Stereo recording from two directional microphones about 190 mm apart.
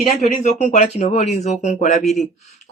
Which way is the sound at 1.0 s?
35° left (ahead or behind).